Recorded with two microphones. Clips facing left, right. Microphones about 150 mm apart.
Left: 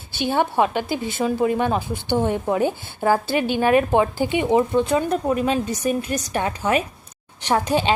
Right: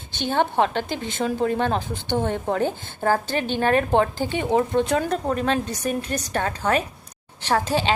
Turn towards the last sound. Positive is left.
turn(degrees=15)  # may be behind; listen again after turning